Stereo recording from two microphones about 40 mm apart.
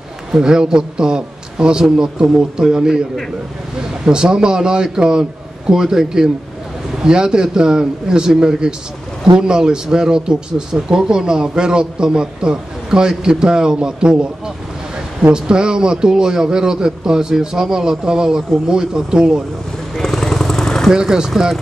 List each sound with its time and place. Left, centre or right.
0.3 s speech: centre
4.0 s speech: right
15.3 s speech: right
20.0 s vehicle: centre
20.9 s speech: centre